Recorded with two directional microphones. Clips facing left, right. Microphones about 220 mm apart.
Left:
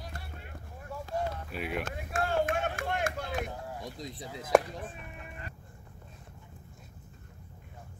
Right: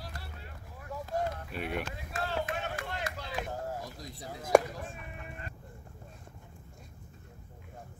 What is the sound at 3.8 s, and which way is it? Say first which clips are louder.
Speech: left 4 dB; 20° left (ahead or behind).